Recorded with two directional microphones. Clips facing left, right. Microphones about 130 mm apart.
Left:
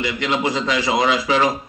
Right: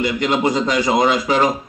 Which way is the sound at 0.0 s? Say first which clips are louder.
Right 4 dB; 45° right (ahead or behind).